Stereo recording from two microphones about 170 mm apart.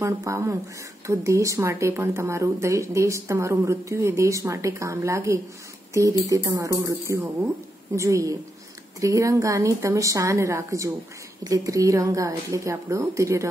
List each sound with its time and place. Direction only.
0.0 s a woman's voice: 15° right (ahead or behind)